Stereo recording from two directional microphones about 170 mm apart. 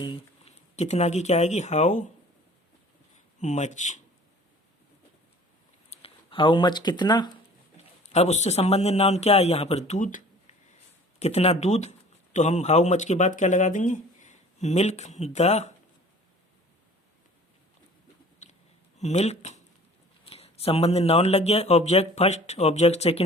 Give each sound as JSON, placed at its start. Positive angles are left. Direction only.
{"t": 0.0, "sound": "speech", "side_deg": 35}
{"t": 3.4, "sound": "speech", "side_deg": 45}
{"t": 5.9, "sound": "speech", "side_deg": 30}
{"t": 8.0, "sound": "speech", "side_deg": 40}
{"t": 11.2, "sound": "speech", "side_deg": 40}
{"t": 18.9, "sound": "speech", "side_deg": 40}